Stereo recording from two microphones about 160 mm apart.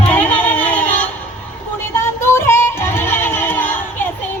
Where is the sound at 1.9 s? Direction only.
15° left (ahead or behind).